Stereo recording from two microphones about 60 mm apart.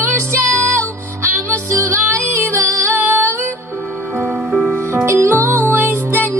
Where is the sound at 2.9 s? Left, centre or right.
Right.